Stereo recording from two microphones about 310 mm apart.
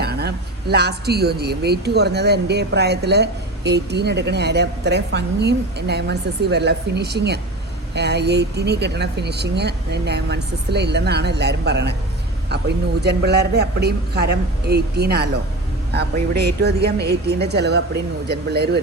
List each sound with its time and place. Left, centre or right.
0.0 s speech: right